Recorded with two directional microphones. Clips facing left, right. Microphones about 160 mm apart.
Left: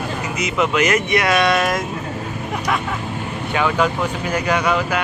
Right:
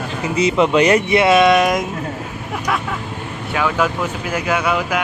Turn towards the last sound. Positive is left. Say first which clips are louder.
# even
turn(degrees=-10)  # may be behind; listen again after turning